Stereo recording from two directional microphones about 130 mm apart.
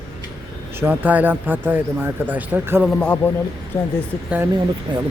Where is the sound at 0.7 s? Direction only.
15° right (ahead or behind).